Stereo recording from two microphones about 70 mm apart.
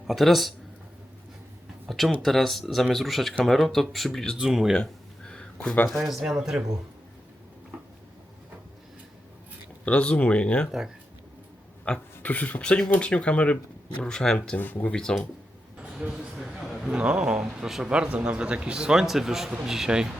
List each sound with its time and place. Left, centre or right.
0.1 s speech: centre
1.9 s speech: centre
4.4 s a man's voice: centre
4.8 s a sound: centre
6.0 s speech: centre
9.8 s speech: centre
10.7 s a man's voice: centre
11.9 s speech: centre
14.5 s speech: left
14.9 s speech: centre
15.8 s a man's voice: centre
16.9 s a man's voice: centre